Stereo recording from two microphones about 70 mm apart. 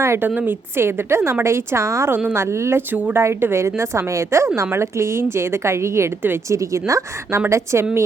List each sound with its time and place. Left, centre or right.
0.0 s a woman's voice: right
0.3 s a woman's voice: right
0.8 s a woman's voice: right
2.1 s a woman's voice: right
2.9 s a woman's voice: right
3.2 s a woman's voice: right
6.6 s a woman's voice: right